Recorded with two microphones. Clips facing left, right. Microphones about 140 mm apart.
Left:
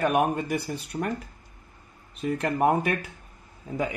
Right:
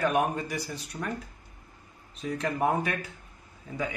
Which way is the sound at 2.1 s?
55° left (ahead or behind).